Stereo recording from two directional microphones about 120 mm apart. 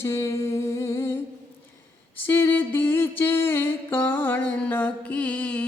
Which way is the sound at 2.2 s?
20° left (ahead or behind).